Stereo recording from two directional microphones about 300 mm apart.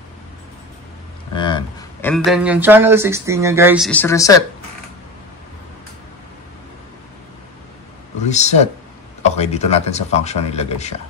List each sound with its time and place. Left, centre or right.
1.3 s speech: centre
8.3 s speech: left